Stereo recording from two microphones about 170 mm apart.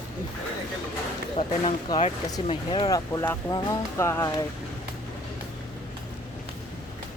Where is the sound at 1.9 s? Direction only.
20° left (ahead or behind).